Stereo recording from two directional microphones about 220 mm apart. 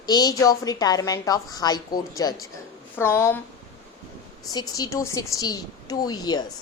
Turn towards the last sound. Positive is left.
turn(degrees=20)  # may be behind; listen again after turning